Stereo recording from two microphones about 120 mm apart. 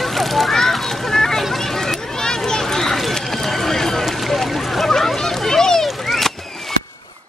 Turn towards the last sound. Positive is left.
turn(degrees=0)  # may be behind; listen again after turning